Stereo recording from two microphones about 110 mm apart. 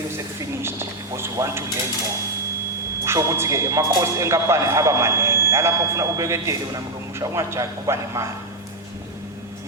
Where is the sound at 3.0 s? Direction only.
25° right (ahead or behind).